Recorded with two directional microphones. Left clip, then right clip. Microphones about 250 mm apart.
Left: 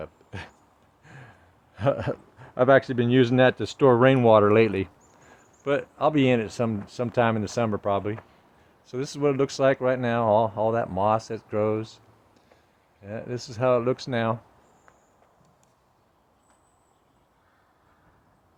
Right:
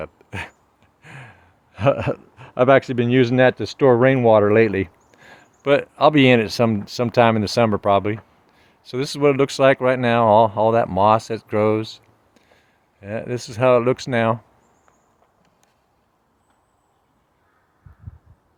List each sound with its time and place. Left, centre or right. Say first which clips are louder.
0.0 s a sound: right 8 dB; right
1.0 s speech: right 8 dB; right
5.1 s speech: right 7 dB; right